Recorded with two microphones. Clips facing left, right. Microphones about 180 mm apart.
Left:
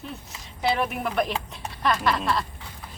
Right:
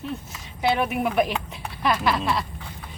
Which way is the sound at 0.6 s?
Centre (ahead or behind).